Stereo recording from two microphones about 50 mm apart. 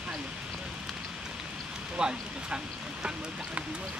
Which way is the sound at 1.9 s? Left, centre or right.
Centre.